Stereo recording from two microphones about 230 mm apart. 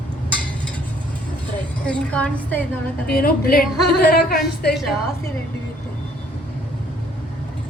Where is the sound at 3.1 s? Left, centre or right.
Left.